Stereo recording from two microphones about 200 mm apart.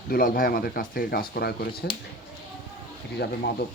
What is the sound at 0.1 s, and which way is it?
Speech, 45° left (ahead or behind).